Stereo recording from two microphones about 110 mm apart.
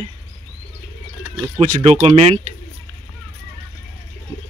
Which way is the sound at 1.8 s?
70° right (ahead or behind).